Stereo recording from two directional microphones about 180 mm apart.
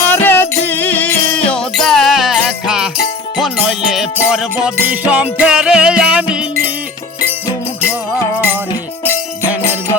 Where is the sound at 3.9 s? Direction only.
5° right (ahead or behind).